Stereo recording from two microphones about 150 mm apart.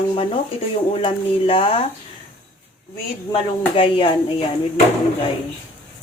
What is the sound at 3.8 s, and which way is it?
Speech, 35° left (ahead or behind).